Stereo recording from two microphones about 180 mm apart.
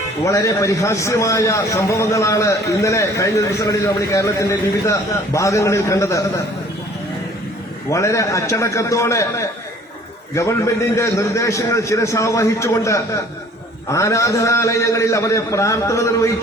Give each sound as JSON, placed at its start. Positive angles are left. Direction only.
{"t": 0.3, "sound": "a man's voice", "side_deg": 20}
{"t": 7.9, "sound": "a man's voice", "side_deg": 15}
{"t": 10.9, "sound": "a man's voice", "side_deg": 15}